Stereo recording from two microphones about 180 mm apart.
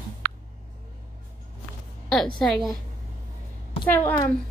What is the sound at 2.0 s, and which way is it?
Speech, centre (ahead or behind).